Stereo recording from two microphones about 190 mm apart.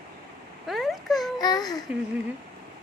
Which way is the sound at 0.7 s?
Centre (ahead or behind).